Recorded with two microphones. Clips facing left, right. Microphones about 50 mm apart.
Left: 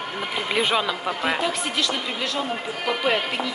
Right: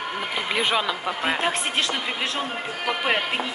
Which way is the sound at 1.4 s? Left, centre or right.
Right.